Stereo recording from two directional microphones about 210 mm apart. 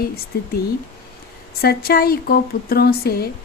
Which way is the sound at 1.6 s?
45° left (ahead or behind).